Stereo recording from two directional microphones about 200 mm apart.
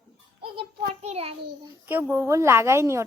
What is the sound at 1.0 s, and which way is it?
Speech, 30° right (ahead or behind).